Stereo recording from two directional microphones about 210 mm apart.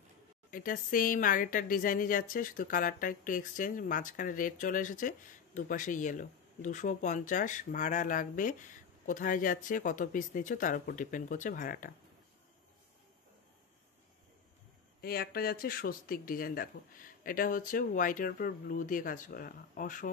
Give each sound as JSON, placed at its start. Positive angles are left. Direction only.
{"t": 0.5, "sound": "a woman's voice", "side_deg": 40}
{"t": 15.0, "sound": "speech", "side_deg": 45}